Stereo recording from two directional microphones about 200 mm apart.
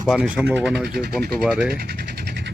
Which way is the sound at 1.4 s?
5° right (ahead or behind).